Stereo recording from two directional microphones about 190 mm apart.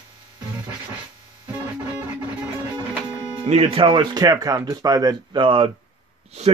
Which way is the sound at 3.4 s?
30° right (ahead or behind).